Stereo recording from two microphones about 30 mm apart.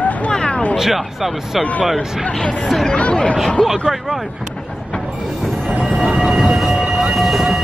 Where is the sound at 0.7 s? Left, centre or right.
Centre.